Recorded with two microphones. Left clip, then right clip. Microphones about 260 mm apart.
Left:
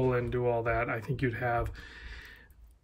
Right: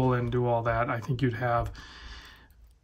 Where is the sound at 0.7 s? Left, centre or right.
Centre.